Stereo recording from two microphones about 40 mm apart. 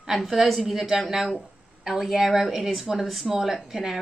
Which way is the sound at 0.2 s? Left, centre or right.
Centre.